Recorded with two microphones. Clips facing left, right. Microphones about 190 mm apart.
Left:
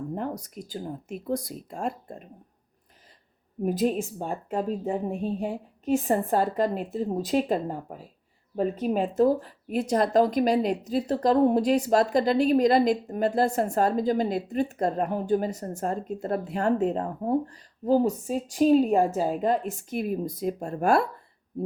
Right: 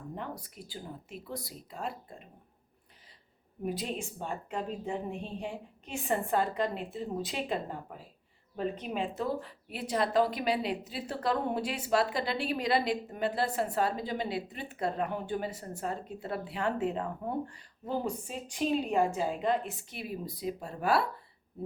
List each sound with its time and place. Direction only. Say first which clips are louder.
0.1 s speech: left 9 dB; 45° left (ahead or behind)
3.6 s speech: left 10 dB; 45° left (ahead or behind)